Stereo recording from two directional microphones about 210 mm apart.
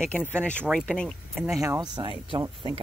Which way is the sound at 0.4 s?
5° left (ahead or behind).